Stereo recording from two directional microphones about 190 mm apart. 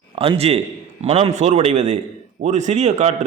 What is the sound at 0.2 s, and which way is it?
A man's voice, 30° right (ahead or behind).